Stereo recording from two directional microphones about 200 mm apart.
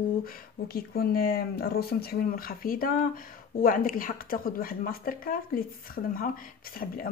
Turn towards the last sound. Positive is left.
turn(degrees=45)  # may be behind; listen again after turning